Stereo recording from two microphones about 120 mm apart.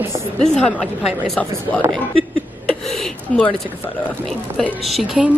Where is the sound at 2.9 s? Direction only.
5° left (ahead or behind).